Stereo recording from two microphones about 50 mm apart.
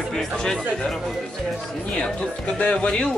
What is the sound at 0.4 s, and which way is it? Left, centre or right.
Speech, centre.